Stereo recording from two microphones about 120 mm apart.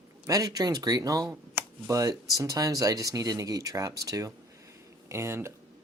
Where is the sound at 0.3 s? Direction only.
30° right (ahead or behind).